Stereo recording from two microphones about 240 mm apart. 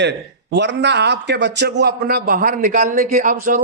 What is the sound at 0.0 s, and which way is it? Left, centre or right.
A man's voice, right.